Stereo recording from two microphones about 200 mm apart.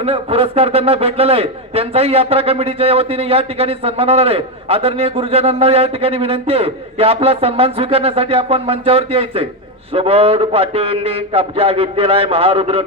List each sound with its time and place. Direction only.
0.0 s a man's voice: 30° right (ahead or behind)